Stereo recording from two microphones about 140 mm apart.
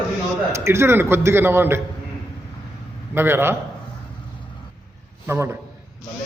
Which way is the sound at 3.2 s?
15° right (ahead or behind).